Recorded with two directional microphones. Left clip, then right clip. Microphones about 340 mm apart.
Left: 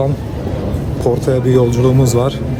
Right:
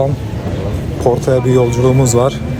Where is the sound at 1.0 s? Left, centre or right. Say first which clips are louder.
Right 2 dB; centre.